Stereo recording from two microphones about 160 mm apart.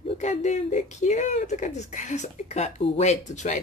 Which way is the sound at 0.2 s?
45° left (ahead or behind).